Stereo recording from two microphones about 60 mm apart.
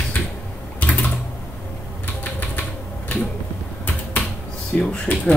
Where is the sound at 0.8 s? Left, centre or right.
Left.